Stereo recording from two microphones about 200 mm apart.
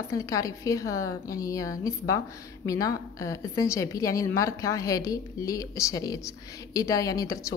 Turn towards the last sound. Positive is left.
turn(degrees=15)  # may be behind; listen again after turning